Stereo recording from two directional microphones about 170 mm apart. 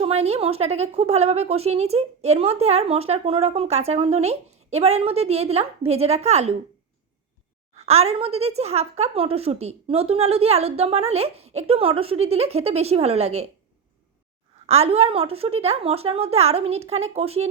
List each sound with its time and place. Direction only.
0.0 s speech: 35° right (ahead or behind)
7.8 s speech: 40° right (ahead or behind)
14.7 s speech: 35° right (ahead or behind)